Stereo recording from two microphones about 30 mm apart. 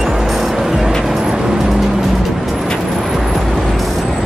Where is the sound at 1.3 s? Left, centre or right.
Right.